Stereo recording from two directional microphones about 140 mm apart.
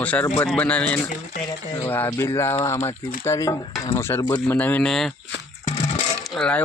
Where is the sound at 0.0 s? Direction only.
10° left (ahead or behind).